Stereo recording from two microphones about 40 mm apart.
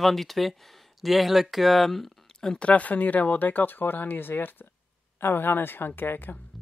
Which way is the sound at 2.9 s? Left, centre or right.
Left.